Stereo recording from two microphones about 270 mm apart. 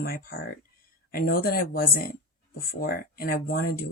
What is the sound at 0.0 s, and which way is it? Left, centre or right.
Speech, left.